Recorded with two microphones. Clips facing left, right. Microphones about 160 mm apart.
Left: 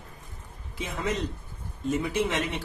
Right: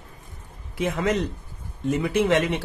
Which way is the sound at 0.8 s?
70° right (ahead or behind).